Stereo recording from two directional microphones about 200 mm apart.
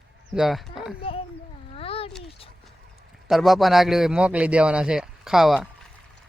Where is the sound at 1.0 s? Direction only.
30° left (ahead or behind).